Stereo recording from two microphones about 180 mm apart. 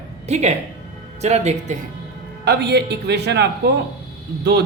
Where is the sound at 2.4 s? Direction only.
65° right (ahead or behind).